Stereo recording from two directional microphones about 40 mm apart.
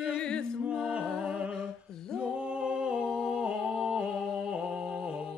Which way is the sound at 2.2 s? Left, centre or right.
Right.